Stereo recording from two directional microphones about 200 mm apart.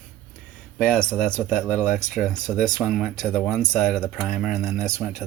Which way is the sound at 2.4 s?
40° left (ahead or behind).